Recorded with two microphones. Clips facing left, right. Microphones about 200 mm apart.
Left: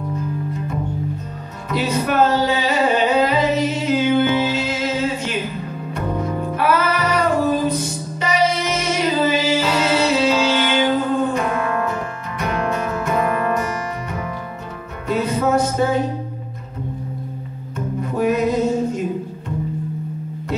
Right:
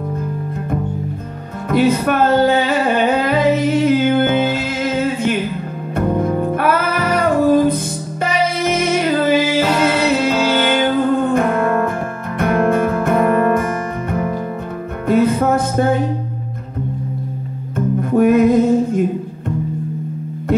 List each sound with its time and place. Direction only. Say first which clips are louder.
1.7 s music: right 6 dB; 55° right (ahead or behind)
17.7 s music: right 8 dB; 55° right (ahead or behind)